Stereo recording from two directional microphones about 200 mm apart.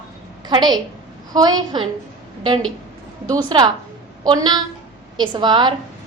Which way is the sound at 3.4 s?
25° right (ahead or behind).